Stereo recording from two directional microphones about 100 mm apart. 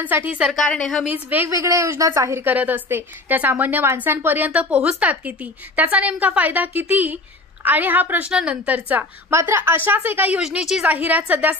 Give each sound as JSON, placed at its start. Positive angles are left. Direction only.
{"t": 0.0, "sound": "a woman's voice", "side_deg": -15}
{"t": 0.4, "sound": "a woman's voice", "side_deg": 0}
{"t": 0.7, "sound": "a woman's voice", "side_deg": 10}
{"t": 1.0, "sound": "a woman's voice", "side_deg": -20}
{"t": 1.5, "sound": "speech", "side_deg": -30}
{"t": 2.4, "sound": "a woman's voice", "side_deg": -15}
{"t": 10.4, "sound": "a woman's voice", "side_deg": -5}